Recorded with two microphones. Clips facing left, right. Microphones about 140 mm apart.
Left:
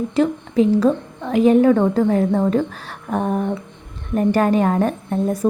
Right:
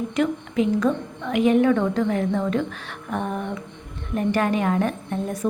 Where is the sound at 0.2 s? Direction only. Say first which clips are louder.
Left 5 dB; 35° left (ahead or behind).